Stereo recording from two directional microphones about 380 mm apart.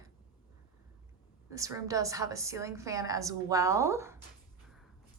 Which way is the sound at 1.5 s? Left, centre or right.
Centre.